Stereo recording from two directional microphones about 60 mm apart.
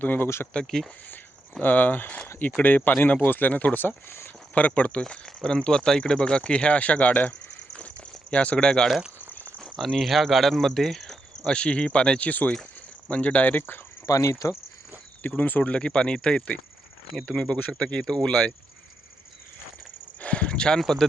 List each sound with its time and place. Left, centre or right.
0.0 s speech: left
0.5 s speech: centre
1.6 s speech: left
3.8 s speech: left
4.5 s speech: left
9.7 s speech: centre
11.5 s speech: centre
12.3 s speech: left
14.1 s speech: left
15.4 s speech: left
20.1 s a sound: left